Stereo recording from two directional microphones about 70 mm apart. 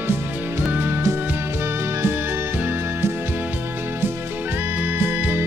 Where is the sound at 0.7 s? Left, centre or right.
Right.